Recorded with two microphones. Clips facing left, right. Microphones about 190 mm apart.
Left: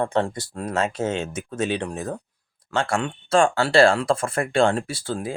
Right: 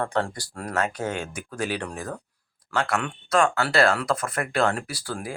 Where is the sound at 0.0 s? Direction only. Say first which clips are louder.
Left 4 dB; 20° left (ahead or behind).